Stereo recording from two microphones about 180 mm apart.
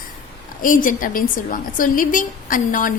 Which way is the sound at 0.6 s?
50° left (ahead or behind).